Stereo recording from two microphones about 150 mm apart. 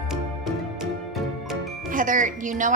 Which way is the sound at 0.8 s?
5° right (ahead or behind).